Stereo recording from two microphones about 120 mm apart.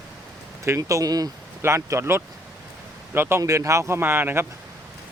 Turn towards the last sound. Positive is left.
turn(degrees=-20)  # may be behind; listen again after turning